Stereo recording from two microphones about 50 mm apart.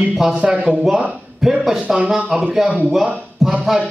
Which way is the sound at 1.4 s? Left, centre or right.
Centre.